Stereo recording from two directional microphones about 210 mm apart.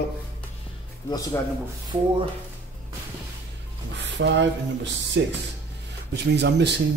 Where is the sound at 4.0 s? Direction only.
60° right (ahead or behind).